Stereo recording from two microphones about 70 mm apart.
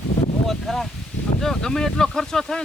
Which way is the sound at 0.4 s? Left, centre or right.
Centre.